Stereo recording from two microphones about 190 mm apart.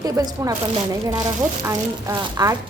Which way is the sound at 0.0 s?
20° right (ahead or behind).